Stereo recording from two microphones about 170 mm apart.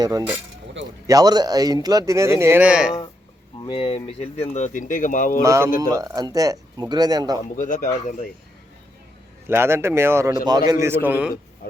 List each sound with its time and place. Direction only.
0.0 s speech: 20° right (ahead or behind); by 2.9 s 5° right (ahead or behind)
3.6 s speech: 30° left (ahead or behind); by 5.4 s 50° left (ahead or behind)
5.4 s speech: 15° right (ahead or behind)
7.5 s speech: 50° left (ahead or behind)
9.5 s speech: 15° right (ahead or behind)